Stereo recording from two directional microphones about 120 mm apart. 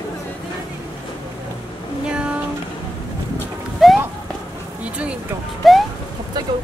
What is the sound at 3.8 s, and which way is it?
Music, centre (ahead or behind).